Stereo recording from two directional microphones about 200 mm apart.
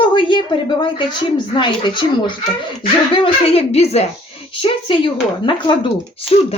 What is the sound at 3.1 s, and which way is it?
A woman's voice, 30° left (ahead or behind).